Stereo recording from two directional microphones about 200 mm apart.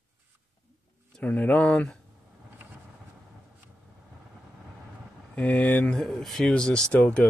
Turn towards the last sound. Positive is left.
turn(degrees=5)  # may be behind; listen again after turning